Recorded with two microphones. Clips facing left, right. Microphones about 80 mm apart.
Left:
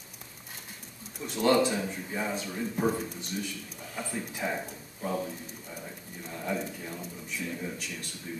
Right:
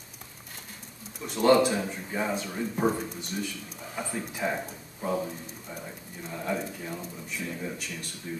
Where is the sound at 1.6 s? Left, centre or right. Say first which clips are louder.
Right 2 dB; centre.